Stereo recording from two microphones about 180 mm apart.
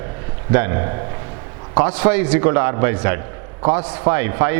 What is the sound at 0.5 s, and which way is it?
Speech, 15° right (ahead or behind).